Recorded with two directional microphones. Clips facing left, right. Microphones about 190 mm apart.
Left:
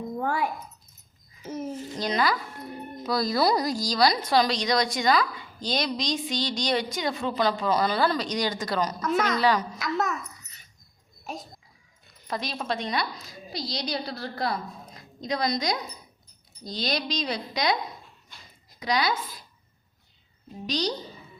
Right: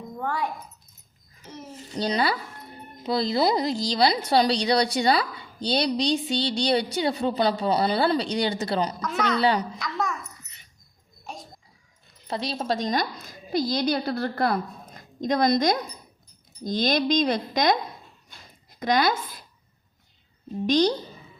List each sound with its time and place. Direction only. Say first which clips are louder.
0.2 s a sound: left 1 dB; 10° left (ahead or behind)
2.0 s speech: right 2 dB; 30° right (ahead or behind)
9.0 s a woman's voice: left 2 dB; 5° left (ahead or behind)
9.3 s a woman's voice: right 4 dB; 30° right (ahead or behind)
9.7 s a woman's voice: left 2 dB; centre (ahead or behind)
12.3 s speech: right 3 dB; 30° right (ahead or behind)
13.1 s a woman's voice: right 10 dB; 55° right (ahead or behind)
18.8 s a woman's voice: right 4 dB; 50° right (ahead or behind)
20.7 s a woman's voice: right 8 dB; 50° right (ahead or behind)